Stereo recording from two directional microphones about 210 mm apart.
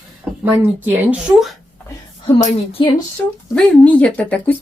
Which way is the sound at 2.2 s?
25° left (ahead or behind).